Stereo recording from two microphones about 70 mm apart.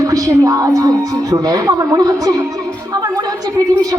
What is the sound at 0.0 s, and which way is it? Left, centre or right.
A woman's voice, right.